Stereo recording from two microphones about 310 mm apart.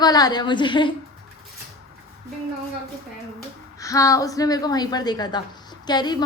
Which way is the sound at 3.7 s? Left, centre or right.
Centre.